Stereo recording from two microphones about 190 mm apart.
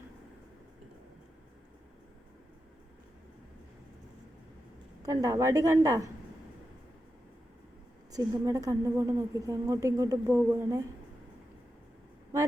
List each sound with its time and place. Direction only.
5.0 s a woman's voice: 20° right (ahead or behind)
8.1 s a woman's voice: 20° right (ahead or behind)